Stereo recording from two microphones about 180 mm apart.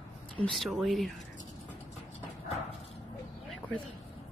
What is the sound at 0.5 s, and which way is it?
Speech, centre (ahead or behind).